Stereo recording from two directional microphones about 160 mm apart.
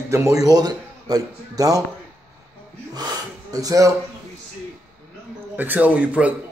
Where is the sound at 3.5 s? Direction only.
20° right (ahead or behind).